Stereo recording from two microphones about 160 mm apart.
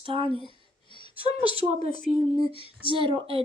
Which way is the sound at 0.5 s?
30° left (ahead or behind).